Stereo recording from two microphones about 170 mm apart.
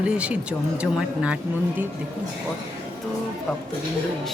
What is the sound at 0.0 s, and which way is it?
Speech, 5° right (ahead or behind).